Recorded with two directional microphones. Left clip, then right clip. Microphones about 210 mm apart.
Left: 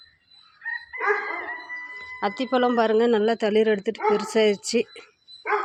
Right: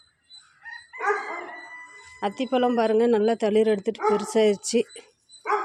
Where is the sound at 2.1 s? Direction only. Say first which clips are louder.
Left 1 dB; 10° right (ahead or behind).